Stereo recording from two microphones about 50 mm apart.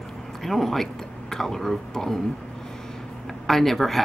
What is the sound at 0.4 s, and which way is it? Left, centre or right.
Speech, centre.